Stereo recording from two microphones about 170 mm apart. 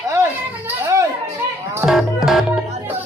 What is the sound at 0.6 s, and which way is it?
Children playing, 15° right (ahead or behind).